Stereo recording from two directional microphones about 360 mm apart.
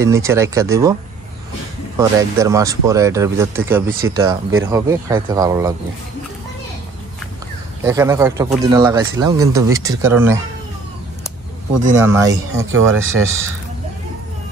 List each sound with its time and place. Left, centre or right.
0.0 s speech: centre
2.0 s speech: centre
7.8 s speech: centre
11.9 s speech: centre
12.5 s speech: right